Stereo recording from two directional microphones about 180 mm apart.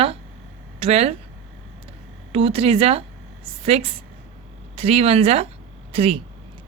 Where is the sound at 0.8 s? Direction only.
35° right (ahead or behind).